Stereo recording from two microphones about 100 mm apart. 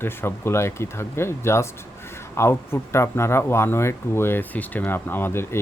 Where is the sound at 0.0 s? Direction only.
25° left (ahead or behind).